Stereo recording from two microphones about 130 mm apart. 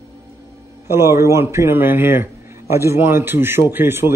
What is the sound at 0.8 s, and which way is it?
A man's voice, 20° right (ahead or behind).